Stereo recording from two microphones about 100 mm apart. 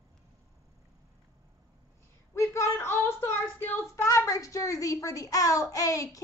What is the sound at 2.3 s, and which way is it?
Child singing, 30° left (ahead or behind).